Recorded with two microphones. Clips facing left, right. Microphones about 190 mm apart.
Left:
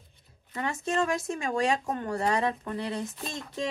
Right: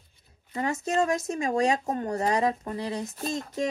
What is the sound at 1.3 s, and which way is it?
Speech, 40° right (ahead or behind).